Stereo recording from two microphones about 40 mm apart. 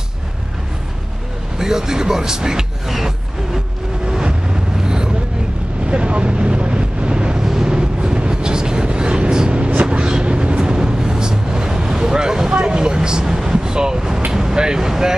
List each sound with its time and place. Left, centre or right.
1.6 s speech: centre
4.8 s vehicle: centre
5.9 s wind noise: right
7.4 s vehicle: centre
14.3 s speech: centre